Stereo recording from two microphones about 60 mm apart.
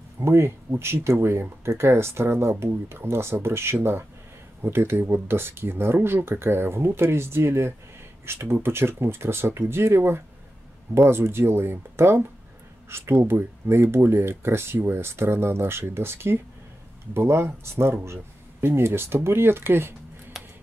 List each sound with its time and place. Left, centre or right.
0.2 s speech: right
18.0 s a sound: right
18.8 s speech: right